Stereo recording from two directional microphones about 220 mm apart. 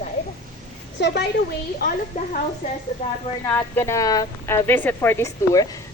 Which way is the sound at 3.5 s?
10° left (ahead or behind).